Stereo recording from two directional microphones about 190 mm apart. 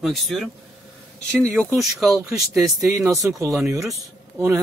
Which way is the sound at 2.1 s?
20° right (ahead or behind).